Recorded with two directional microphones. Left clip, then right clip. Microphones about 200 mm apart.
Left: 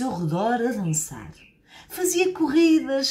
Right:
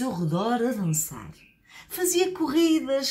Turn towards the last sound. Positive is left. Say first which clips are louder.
# left 3 dB
turn(degrees=15)  # may be behind; listen again after turning